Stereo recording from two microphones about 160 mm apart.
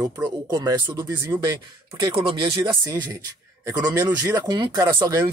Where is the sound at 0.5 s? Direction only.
25° right (ahead or behind).